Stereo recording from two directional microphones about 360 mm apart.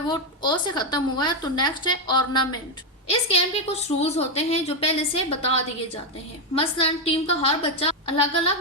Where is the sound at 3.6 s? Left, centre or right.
Centre.